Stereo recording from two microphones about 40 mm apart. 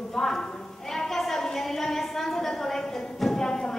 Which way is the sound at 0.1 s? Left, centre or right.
Centre.